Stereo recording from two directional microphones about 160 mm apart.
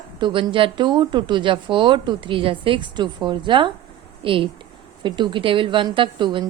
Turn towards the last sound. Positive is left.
turn(degrees=-30)  # may be behind; listen again after turning